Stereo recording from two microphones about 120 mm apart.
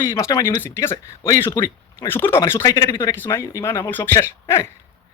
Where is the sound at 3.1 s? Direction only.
20° left (ahead or behind).